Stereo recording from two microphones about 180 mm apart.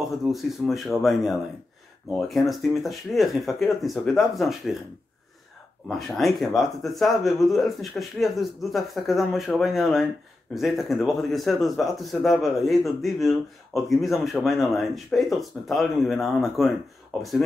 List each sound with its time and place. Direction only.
0.1 s speech: centre (ahead or behind)
5.9 s speech: centre (ahead or behind)